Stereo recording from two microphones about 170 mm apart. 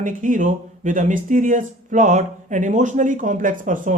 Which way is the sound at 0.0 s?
50° right (ahead or behind).